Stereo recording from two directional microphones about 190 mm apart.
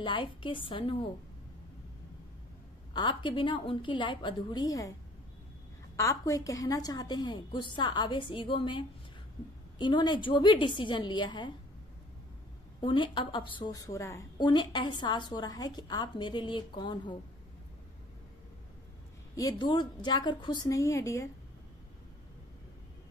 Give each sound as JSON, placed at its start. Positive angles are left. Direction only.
{"t": 0.0, "sound": "a woman's voice", "side_deg": 25}
{"t": 2.9, "sound": "a woman's voice", "side_deg": 25}
{"t": 5.9, "sound": "a woman's voice", "side_deg": 15}
{"t": 12.8, "sound": "a woman's voice", "side_deg": 25}
{"t": 19.3, "sound": "a woman's voice", "side_deg": 20}